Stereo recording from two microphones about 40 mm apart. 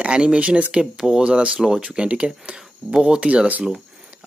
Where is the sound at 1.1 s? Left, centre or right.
Right.